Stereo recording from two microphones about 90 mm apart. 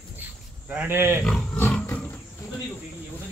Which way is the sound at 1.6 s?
20° left (ahead or behind).